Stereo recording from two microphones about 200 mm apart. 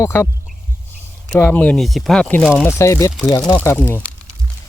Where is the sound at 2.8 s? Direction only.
15° left (ahead or behind).